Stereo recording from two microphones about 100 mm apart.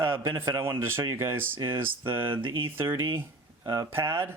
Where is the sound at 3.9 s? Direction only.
25° right (ahead or behind).